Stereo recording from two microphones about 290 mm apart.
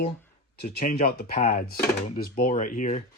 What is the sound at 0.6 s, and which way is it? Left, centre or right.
Speech, left.